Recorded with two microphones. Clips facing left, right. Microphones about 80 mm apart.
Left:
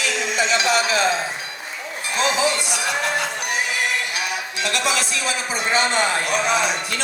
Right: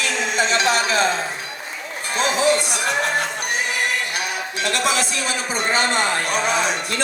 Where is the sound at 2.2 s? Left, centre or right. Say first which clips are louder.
Right 2 dB; right.